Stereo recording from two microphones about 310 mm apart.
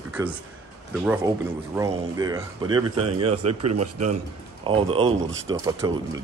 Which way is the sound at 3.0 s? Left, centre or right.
Right.